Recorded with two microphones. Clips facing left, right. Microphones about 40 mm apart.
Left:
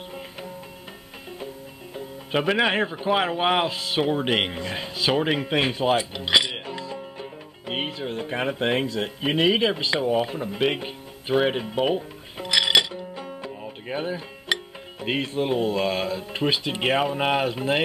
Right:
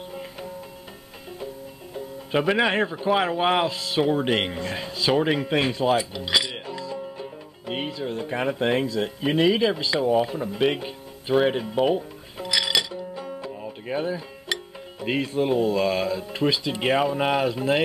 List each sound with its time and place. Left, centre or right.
2.0 s music: centre
2.6 s speech: centre
6.1 s music: left
10.1 s speech: centre
12.4 s music: left
13.2 s music: centre
16.8 s speech: centre